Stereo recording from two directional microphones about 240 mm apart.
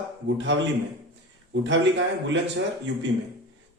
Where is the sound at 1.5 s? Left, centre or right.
Right.